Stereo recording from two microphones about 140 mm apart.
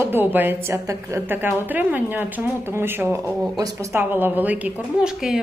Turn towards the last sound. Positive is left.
turn(degrees=-5)  # may be behind; listen again after turning